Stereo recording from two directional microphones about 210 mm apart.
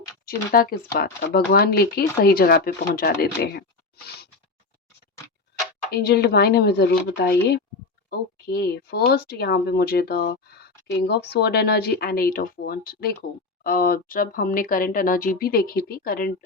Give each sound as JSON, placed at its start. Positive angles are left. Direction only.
{"t": 0.3, "sound": "speech", "side_deg": 45}
{"t": 5.9, "sound": "speech", "side_deg": 50}